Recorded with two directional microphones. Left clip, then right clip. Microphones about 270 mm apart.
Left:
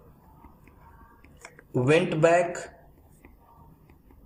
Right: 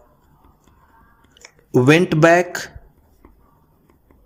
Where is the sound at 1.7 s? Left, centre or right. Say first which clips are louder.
Right 8 dB; right.